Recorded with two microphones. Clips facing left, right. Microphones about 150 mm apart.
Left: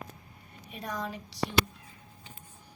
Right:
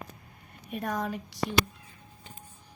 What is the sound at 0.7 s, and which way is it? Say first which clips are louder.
Speech: right 5 dB; 50° right (ahead or behind).